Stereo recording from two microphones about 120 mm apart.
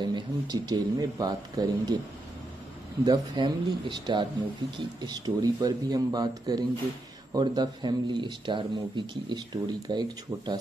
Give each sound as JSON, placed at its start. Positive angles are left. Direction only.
{"t": 0.0, "sound": "speech", "side_deg": -35}
{"t": 3.1, "sound": "speech", "side_deg": -40}